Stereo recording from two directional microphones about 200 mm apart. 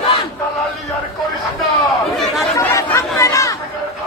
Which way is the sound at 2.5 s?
15° left (ahead or behind).